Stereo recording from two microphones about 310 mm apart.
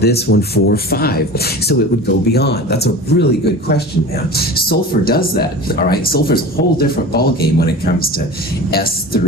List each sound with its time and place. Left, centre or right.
0.0 s speech: left